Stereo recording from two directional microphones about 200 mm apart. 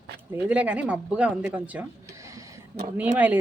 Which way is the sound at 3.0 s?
10° right (ahead or behind).